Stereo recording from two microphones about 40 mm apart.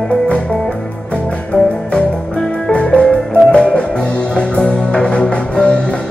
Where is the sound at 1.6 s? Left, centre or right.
Left.